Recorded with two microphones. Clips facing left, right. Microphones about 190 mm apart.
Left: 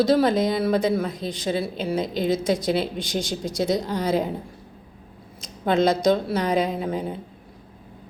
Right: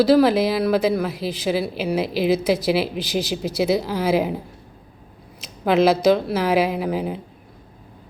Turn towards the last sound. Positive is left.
turn(degrees=-5)  # may be behind; listen again after turning